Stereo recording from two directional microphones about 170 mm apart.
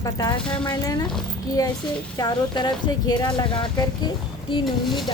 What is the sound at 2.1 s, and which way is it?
Speech, 25° left (ahead or behind).